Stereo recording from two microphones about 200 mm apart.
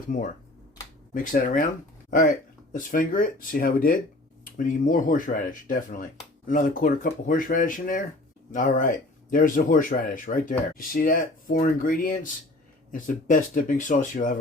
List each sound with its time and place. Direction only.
0.1 s speech: 40° left (ahead or behind)